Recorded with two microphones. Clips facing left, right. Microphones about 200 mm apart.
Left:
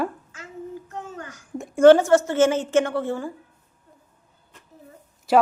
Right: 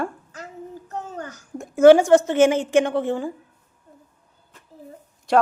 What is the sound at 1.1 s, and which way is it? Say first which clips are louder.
Speech: right 3 dB; 40° right (ahead or behind).